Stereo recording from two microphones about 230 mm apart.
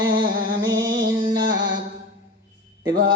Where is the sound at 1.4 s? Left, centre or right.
Right.